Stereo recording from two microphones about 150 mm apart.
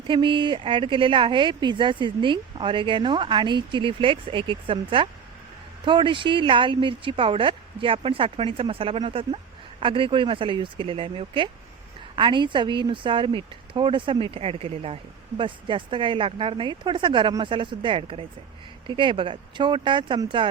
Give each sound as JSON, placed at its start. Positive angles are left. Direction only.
{"t": 0.1, "sound": "speech", "side_deg": -35}